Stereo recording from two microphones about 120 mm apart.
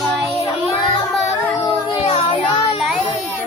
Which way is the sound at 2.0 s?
60° left (ahead or behind).